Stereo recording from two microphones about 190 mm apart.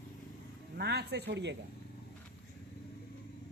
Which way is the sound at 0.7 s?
60° right (ahead or behind).